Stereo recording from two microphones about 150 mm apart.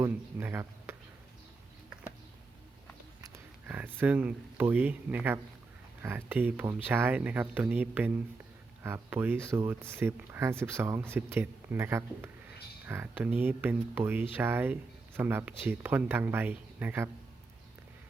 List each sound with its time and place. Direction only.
0.0 s speech: 15° right (ahead or behind)
3.3 s speech: 10° right (ahead or behind)